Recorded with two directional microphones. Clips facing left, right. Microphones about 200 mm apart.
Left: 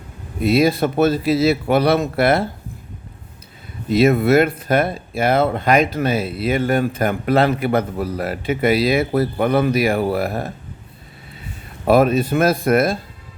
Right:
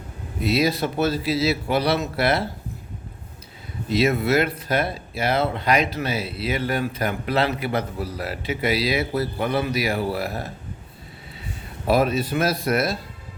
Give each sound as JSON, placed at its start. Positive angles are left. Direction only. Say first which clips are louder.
{"t": 0.4, "sound": "speech", "louder": "left 6 dB", "side_deg": 50}
{"t": 3.8, "sound": "speech", "louder": "left 6 dB", "side_deg": 50}
{"t": 11.9, "sound": "speech", "louder": "left 6 dB", "side_deg": 55}